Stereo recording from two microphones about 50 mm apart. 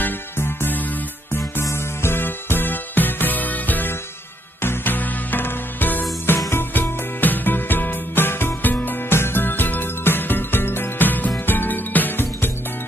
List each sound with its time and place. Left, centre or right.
0.0 s music: left
1.6 s music: left
4.6 s music: left
9.1 s music: left